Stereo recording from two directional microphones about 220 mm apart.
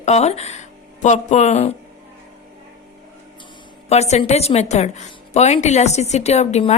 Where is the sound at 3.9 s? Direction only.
30° left (ahead or behind).